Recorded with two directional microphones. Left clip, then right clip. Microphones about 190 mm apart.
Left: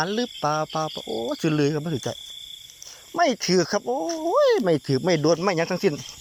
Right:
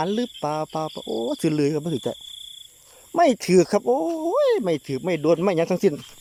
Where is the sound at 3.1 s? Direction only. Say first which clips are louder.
Right 4 dB; 30° right (ahead or behind).